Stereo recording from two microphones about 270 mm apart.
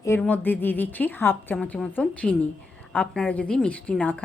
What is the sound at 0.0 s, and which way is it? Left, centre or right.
A woman's voice, centre.